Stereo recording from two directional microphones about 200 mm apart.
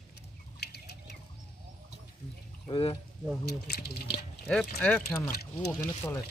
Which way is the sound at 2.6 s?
25° left (ahead or behind).